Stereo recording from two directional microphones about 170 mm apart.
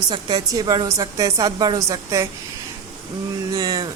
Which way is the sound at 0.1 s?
25° right (ahead or behind).